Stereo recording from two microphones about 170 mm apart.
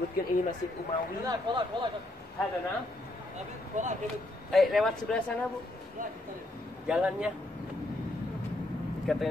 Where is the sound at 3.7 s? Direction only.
45° right (ahead or behind).